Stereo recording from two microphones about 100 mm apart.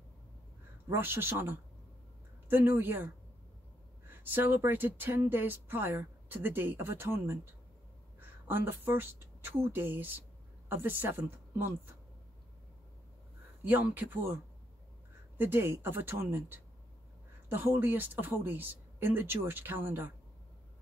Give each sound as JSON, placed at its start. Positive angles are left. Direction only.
{"t": 0.8, "sound": "speech", "side_deg": -25}
{"t": 4.1, "sound": "speech", "side_deg": -20}
{"t": 13.7, "sound": "speech", "side_deg": -15}
{"t": 15.3, "sound": "speech", "side_deg": -20}